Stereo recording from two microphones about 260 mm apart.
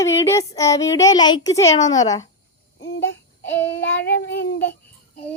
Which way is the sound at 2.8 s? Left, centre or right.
Left.